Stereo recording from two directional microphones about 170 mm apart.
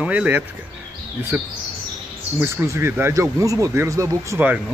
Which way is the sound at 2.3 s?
15° right (ahead or behind).